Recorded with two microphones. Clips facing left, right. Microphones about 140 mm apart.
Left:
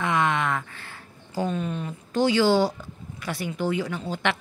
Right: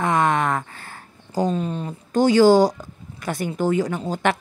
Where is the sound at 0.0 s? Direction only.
45° right (ahead or behind).